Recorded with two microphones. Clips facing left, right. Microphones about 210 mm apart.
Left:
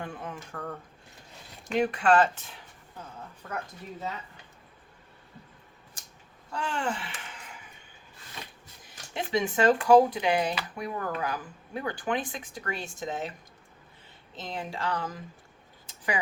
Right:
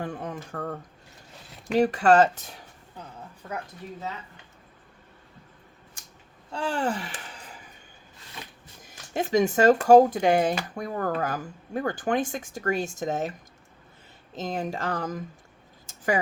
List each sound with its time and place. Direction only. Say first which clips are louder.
0.0 s speech: right 5 dB; 35° right (ahead or behind)
6.5 s speech: right 4 dB; 35° right (ahead or behind)
8.8 s speech: right 6 dB; 45° right (ahead or behind)
14.3 s speech: right 6 dB; 45° right (ahead or behind)